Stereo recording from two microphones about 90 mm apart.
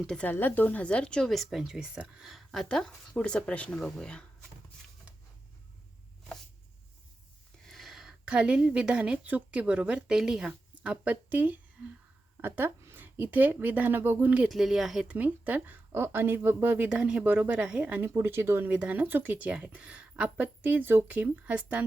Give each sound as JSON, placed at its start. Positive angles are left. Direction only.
{"t": 0.3, "sound": "speech", "side_deg": 20}
{"t": 7.7, "sound": "a woman's voice", "side_deg": 0}
{"t": 14.4, "sound": "speech", "side_deg": -5}
{"t": 15.1, "sound": "speech", "side_deg": -20}